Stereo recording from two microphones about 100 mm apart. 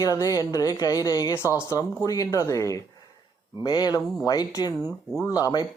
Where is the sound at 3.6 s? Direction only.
45° left (ahead or behind).